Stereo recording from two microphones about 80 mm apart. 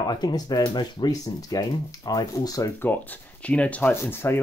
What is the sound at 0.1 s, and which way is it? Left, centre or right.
Speech, left.